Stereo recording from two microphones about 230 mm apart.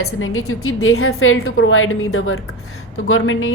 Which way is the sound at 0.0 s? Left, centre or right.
Left.